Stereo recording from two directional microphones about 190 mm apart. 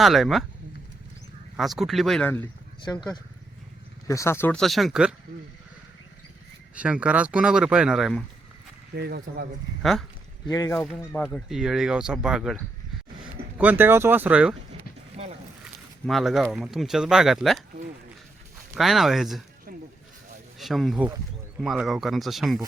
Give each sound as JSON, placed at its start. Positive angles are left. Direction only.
{"t": 0.0, "sound": "speech", "side_deg": 0}
{"t": 1.5, "sound": "speech", "side_deg": 0}
{"t": 4.0, "sound": "speech", "side_deg": 15}
{"t": 6.7, "sound": "speech", "side_deg": -5}
{"t": 9.0, "sound": "speech", "side_deg": -55}
{"t": 10.4, "sound": "speech", "side_deg": 15}
{"t": 10.8, "sound": "speech", "side_deg": 5}
{"t": 15.2, "sound": "boat", "side_deg": -35}
{"t": 16.0, "sound": "speech", "side_deg": 0}
{"t": 18.8, "sound": "speech", "side_deg": 0}
{"t": 20.6, "sound": "speech", "side_deg": 0}